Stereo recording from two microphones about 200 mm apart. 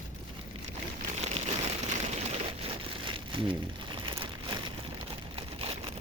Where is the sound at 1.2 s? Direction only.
30° right (ahead or behind).